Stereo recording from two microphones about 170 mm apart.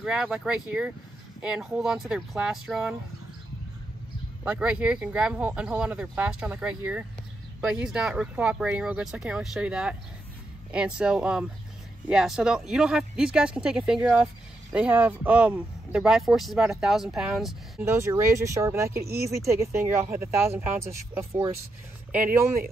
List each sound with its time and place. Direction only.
0.0 s speech: 5° right (ahead or behind)
4.5 s speech: 5° right (ahead or behind)
17.7 s speech: 15° right (ahead or behind)